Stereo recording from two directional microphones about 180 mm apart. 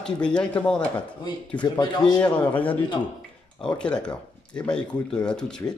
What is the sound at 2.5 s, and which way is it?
Speech, 10° left (ahead or behind).